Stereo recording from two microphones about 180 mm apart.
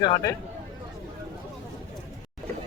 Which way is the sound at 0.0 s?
25° left (ahead or behind).